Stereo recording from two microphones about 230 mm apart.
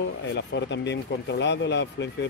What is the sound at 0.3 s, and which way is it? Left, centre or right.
Speech, left.